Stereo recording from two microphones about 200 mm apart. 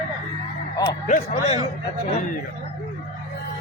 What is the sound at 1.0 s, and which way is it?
Speech, 40° left (ahead or behind).